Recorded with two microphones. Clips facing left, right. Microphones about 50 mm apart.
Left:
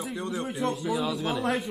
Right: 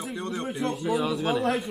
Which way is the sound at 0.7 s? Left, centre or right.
Centre.